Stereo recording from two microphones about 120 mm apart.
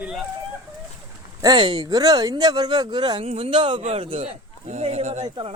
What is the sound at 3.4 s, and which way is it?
Speech, 40° right (ahead or behind).